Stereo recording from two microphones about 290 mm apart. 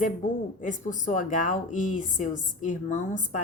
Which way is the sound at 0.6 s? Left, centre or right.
Left.